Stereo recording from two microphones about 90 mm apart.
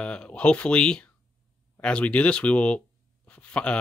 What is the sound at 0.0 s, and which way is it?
Speech, 10° left (ahead or behind).